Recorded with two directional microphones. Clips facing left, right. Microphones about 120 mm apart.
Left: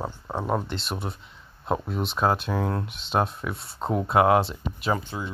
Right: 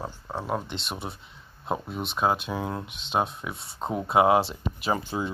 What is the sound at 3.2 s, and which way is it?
Speech, centre (ahead or behind).